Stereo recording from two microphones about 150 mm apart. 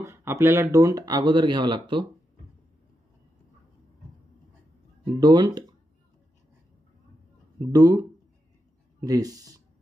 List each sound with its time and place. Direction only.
0.0 s speech: 20° right (ahead or behind)
5.2 s speech: 30° right (ahead or behind)
7.7 s speech: 25° right (ahead or behind)